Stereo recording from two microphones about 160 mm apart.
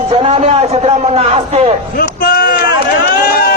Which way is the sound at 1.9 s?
65° left (ahead or behind).